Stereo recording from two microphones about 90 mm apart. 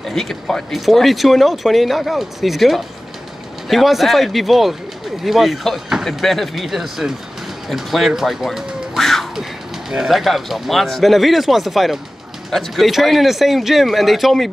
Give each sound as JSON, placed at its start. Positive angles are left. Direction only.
{"t": 0.1, "sound": "speech", "side_deg": 5}